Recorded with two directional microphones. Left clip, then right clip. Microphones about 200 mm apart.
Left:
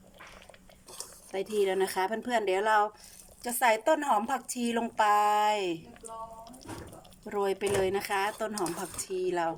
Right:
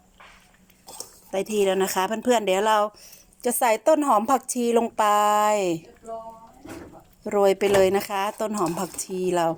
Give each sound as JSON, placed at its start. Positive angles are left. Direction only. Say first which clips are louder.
{"t": 1.3, "sound": "a woman's voice", "louder": "right 6 dB", "side_deg": -10}
{"t": 7.3, "sound": "a woman's voice", "louder": "right 10 dB", "side_deg": -15}